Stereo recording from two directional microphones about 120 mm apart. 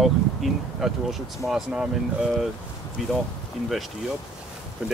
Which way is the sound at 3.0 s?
5° right (ahead or behind).